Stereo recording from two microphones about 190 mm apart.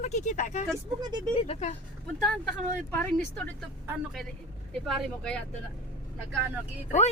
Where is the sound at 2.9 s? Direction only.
10° left (ahead or behind).